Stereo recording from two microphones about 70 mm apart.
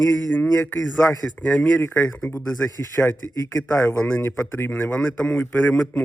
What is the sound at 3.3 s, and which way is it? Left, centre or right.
Speech, left.